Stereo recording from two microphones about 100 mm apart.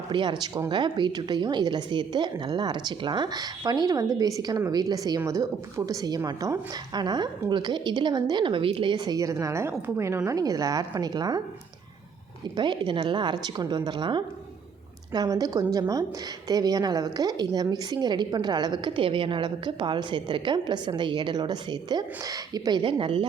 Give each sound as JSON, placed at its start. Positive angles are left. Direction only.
{"t": 0.1, "sound": "a woman's voice", "side_deg": -50}
{"t": 10.2, "sound": "a woman's voice", "side_deg": -35}
{"t": 12.5, "sound": "a woman's voice", "side_deg": -50}
{"t": 15.1, "sound": "a woman's voice", "side_deg": -40}
{"t": 16.5, "sound": "a woman's voice", "side_deg": -40}